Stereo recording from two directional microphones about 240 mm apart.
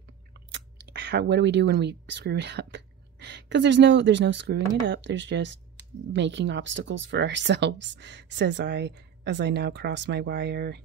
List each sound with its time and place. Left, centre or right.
0.5 s speech: right